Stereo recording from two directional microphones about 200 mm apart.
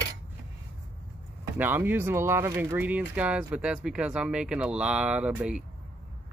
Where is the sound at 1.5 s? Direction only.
10° right (ahead or behind).